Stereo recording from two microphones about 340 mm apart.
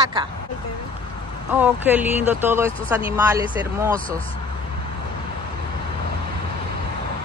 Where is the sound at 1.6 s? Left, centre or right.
Centre.